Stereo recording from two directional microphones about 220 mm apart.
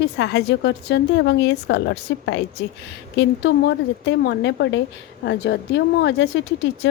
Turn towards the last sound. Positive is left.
turn(degrees=50)  # may be behind; listen again after turning